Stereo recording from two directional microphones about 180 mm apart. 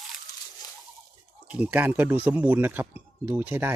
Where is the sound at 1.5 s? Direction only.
10° right (ahead or behind).